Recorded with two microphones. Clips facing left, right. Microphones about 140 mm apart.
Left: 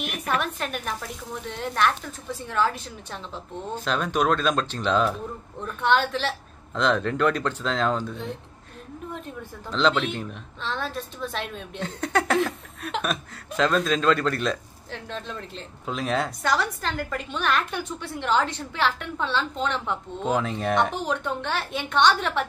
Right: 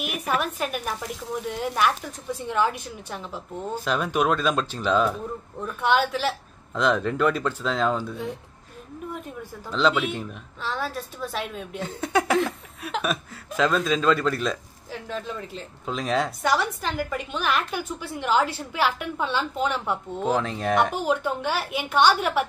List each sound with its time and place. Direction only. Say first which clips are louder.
0.0 s a woman's voice: right 1 dB; 5° right (ahead or behind)